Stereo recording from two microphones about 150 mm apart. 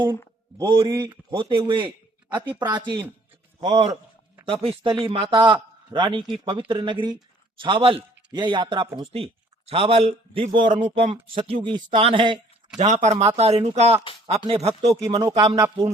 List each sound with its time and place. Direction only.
0.6 s speech: 35° right (ahead or behind)
0.9 s speech: 20° right (ahead or behind)
1.3 s speech: 30° right (ahead or behind)
4.4 s speech: 40° right (ahead or behind)
12.8 s speech: 50° right (ahead or behind)
14.8 s speech: 25° right (ahead or behind)